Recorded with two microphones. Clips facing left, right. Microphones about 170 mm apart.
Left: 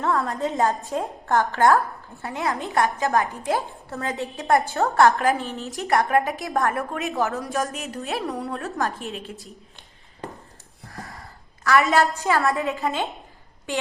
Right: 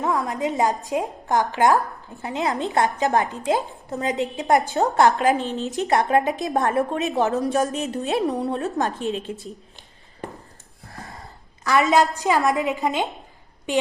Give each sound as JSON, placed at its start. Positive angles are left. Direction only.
{"t": 0.0, "sound": "a woman's voice", "side_deg": -15}
{"t": 11.6, "sound": "a woman's voice", "side_deg": -20}